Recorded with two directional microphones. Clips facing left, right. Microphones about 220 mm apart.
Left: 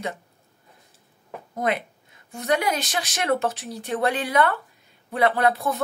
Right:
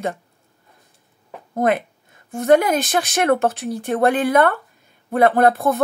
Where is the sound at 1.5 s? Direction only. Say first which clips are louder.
Right 7 dB; 50° right (ahead or behind).